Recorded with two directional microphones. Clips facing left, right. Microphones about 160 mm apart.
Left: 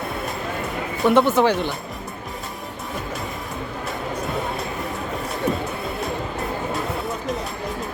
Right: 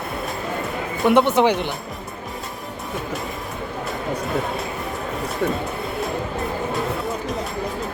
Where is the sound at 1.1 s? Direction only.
20° right (ahead or behind).